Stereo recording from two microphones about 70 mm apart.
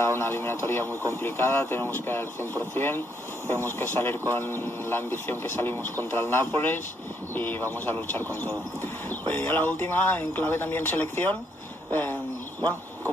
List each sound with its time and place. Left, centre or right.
0.0 s speech: left
9.3 s speech: left